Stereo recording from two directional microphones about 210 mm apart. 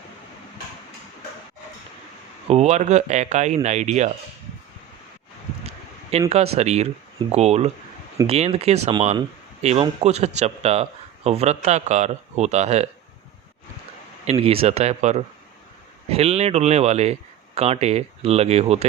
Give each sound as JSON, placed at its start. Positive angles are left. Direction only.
{"t": 2.5, "sound": "speech", "side_deg": -30}
{"t": 5.6, "sound": "speech", "side_deg": -30}
{"t": 14.3, "sound": "speech", "side_deg": -25}